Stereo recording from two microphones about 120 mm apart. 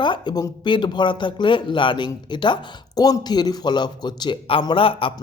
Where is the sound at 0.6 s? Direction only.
40° left (ahead or behind).